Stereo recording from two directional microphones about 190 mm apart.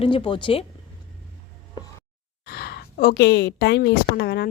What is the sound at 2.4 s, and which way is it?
A woman's voice, 55° left (ahead or behind).